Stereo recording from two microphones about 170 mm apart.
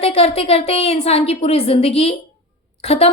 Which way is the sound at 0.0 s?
35° left (ahead or behind).